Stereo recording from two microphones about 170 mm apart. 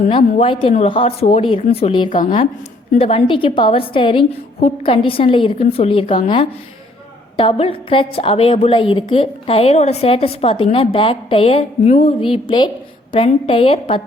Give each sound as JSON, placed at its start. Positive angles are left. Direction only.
{"t": 0.3, "sound": "a woman's voice", "side_deg": 30}